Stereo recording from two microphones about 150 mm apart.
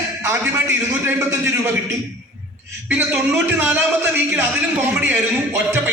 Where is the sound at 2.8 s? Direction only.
10° right (ahead or behind).